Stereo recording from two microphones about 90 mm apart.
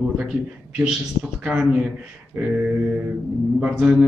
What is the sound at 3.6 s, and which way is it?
Speech, 10° right (ahead or behind).